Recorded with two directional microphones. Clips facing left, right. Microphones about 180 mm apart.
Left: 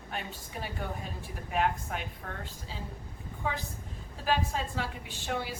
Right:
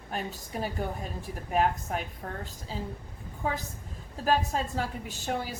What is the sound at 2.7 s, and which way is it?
Speech, 40° right (ahead or behind).